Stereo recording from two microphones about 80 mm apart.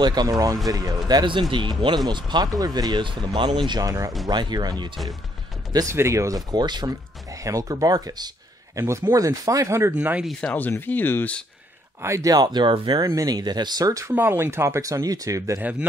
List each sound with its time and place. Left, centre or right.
0.0 s a man's voice: right
1.5 s speech: right
2.0 s speech: right
3.8 s a man's voice: right
4.3 s speech: right
5.9 s speech: right
6.5 s speech: right
8.7 s speech: right
10.4 s speech: left
12.0 s a man's voice: right
12.4 s speech: right
13.1 s speech: right
14.0 s speech: right